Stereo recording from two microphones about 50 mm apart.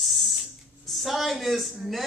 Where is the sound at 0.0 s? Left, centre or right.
Centre.